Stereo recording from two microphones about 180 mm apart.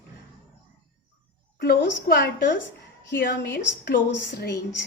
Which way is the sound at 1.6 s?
55° left (ahead or behind).